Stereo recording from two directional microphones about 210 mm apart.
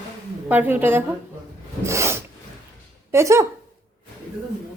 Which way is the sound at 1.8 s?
15° right (ahead or behind).